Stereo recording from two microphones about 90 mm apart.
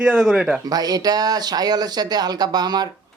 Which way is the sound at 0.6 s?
45° right (ahead or behind).